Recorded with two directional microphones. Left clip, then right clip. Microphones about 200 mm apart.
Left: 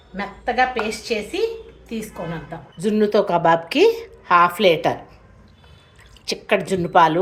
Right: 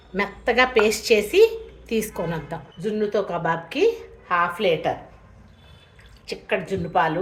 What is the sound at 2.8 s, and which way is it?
A woman's voice, 40° left (ahead or behind).